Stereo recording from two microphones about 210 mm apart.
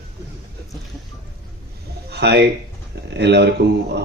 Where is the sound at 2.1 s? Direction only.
50° right (ahead or behind).